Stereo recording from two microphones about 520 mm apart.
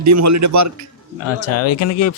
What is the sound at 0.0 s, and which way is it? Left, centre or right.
Speech, right.